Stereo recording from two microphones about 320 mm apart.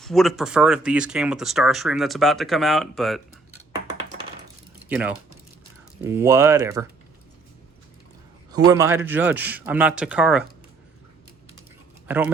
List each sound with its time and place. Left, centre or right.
0.0 s speech: centre
4.9 s speech: centre
8.5 s speech: centre
12.0 s speech: centre